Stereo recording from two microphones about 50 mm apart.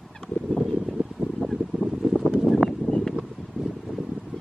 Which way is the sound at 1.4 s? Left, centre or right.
Right.